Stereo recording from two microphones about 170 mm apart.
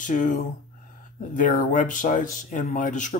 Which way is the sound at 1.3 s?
50° left (ahead or behind).